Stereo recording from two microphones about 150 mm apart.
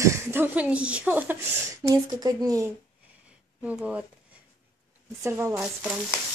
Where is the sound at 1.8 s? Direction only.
25° right (ahead or behind).